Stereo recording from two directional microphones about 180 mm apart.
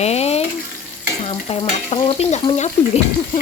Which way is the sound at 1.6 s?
30° left (ahead or behind).